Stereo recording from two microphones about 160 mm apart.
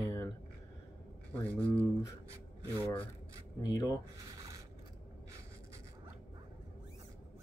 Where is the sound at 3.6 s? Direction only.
25° left (ahead or behind).